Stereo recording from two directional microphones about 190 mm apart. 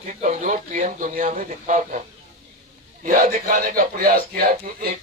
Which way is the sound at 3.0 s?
50° right (ahead or behind).